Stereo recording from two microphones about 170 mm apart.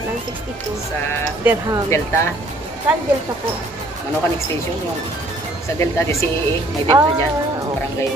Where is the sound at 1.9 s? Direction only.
15° left (ahead or behind).